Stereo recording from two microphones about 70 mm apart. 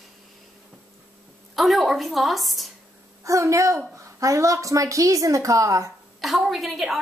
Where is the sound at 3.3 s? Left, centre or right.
Right.